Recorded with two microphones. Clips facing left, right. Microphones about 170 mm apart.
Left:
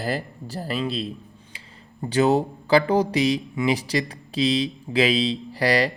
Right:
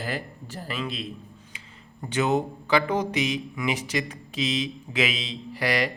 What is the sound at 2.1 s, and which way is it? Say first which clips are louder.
Speech: left 5 dB; 35° left (ahead or behind).